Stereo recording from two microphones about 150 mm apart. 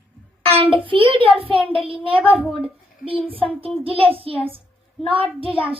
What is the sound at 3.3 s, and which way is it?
Speech, 40° right (ahead or behind).